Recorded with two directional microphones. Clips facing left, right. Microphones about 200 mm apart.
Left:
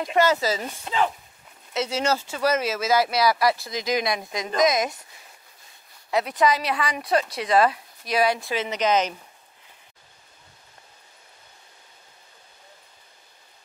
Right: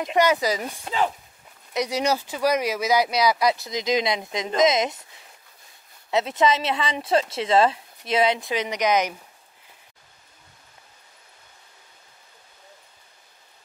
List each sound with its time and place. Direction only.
0.0 s speech: 15° right (ahead or behind)
6.0 s speech: 25° right (ahead or behind)